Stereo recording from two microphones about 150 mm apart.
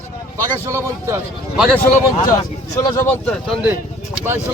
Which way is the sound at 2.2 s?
25° left (ahead or behind).